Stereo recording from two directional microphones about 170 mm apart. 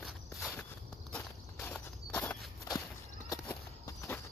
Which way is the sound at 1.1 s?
10° left (ahead or behind).